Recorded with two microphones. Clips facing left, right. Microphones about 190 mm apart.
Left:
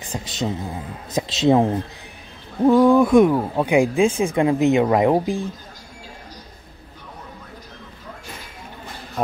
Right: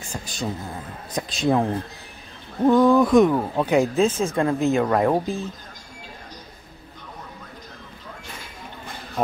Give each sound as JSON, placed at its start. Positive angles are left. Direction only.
{"t": 0.0, "sound": "speech", "side_deg": 20}
{"t": 2.6, "sound": "speech", "side_deg": 10}